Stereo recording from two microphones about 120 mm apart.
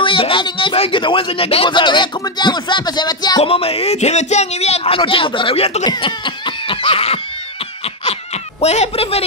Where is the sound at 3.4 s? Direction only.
50° left (ahead or behind).